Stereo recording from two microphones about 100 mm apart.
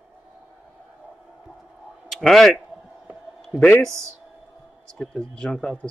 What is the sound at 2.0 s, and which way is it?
Speech, centre (ahead or behind).